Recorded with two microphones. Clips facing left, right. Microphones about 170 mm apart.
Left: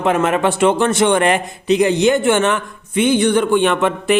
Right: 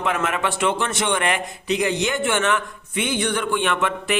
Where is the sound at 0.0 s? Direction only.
30° left (ahead or behind).